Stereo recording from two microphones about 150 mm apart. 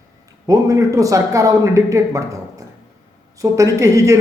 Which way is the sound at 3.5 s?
20° right (ahead or behind).